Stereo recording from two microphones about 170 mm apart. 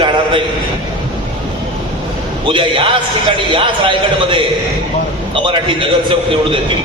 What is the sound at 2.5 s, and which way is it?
A man's voice, 30° right (ahead or behind).